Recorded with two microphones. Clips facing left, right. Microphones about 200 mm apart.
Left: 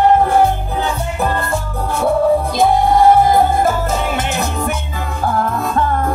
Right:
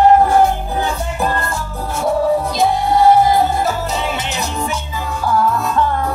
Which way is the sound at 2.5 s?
55° left (ahead or behind).